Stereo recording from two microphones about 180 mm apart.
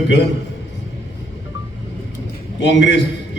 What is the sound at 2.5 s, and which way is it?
Speech, 75° left (ahead or behind).